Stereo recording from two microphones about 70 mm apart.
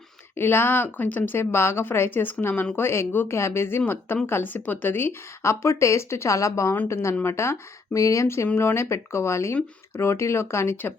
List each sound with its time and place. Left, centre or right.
0.3 s speech: left